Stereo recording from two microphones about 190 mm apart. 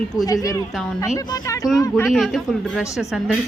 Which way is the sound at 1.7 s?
10° left (ahead or behind).